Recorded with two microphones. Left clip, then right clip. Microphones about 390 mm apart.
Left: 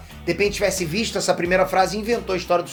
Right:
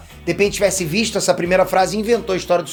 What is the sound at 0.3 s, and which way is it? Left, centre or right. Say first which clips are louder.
Speech: right 4 dB; right.